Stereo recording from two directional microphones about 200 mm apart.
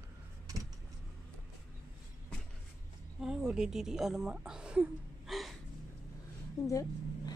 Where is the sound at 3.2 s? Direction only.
5° right (ahead or behind).